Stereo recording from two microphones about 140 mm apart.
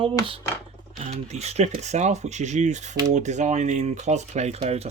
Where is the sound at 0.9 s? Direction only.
50° right (ahead or behind).